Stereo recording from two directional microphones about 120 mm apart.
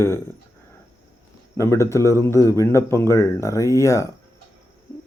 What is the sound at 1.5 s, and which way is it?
Speech, 25° left (ahead or behind).